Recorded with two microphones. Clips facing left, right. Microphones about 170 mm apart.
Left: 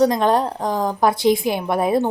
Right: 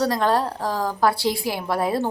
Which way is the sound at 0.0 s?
20° left (ahead or behind).